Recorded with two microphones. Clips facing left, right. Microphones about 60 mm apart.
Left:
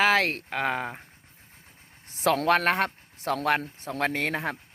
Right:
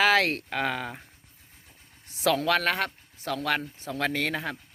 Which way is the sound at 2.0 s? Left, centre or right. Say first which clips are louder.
Left 1 dB; left.